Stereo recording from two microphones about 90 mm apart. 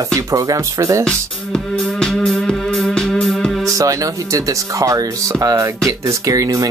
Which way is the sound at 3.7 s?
40° right (ahead or behind).